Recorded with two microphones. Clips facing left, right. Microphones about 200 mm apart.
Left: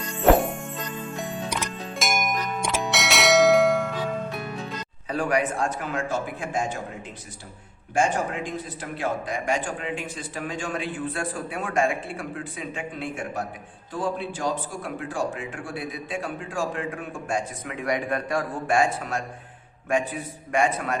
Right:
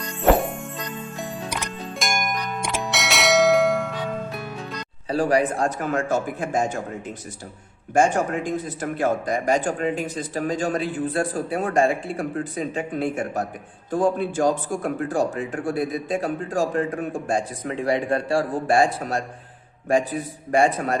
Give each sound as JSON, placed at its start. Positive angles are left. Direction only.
{"t": 0.0, "sound": "music", "side_deg": 0}
{"t": 2.0, "sound": "bell", "side_deg": 0}
{"t": 5.0, "sound": "speech", "side_deg": -35}
{"t": 7.9, "sound": "speech", "side_deg": -45}